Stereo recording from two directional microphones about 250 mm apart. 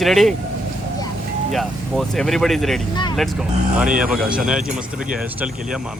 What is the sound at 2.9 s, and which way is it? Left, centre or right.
Speech, centre.